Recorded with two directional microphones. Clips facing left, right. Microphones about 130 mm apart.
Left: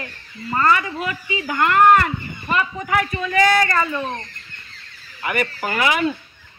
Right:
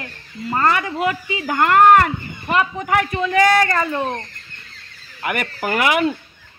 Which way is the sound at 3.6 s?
45° right (ahead or behind).